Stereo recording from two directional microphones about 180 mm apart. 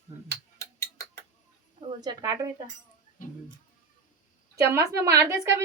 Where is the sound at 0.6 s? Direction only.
15° left (ahead or behind).